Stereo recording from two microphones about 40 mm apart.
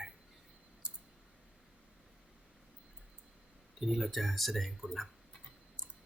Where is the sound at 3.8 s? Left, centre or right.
Centre.